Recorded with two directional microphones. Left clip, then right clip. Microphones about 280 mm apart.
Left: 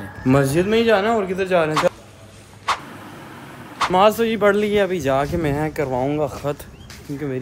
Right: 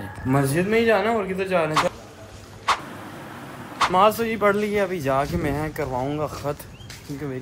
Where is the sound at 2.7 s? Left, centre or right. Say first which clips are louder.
Even; centre.